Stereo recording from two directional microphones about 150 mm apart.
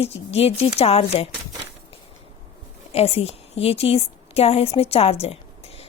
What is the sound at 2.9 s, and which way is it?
A woman's voice, 40° left (ahead or behind).